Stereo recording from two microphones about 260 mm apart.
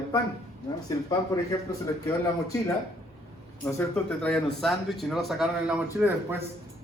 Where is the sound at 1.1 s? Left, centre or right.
Centre.